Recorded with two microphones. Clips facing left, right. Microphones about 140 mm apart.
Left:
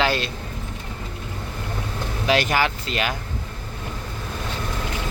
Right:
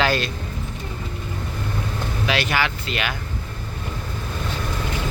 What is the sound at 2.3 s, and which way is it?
Speech, 40° left (ahead or behind).